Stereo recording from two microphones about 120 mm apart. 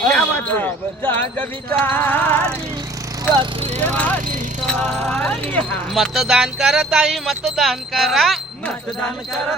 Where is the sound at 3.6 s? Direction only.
70° right (ahead or behind).